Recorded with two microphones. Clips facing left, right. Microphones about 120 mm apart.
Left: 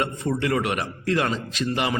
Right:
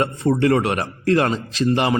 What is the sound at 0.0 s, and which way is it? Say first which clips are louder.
Speech: right 7 dB; 35° right (ahead or behind).